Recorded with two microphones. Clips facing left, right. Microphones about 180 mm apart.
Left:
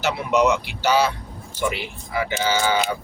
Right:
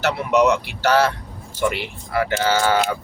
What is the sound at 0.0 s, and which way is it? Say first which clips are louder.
Speech: right 2 dB; 70° right (ahead or behind).